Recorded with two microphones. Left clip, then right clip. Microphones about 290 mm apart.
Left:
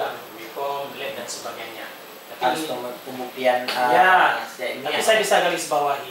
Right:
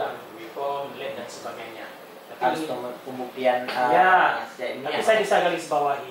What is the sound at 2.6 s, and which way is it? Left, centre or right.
Speech, right.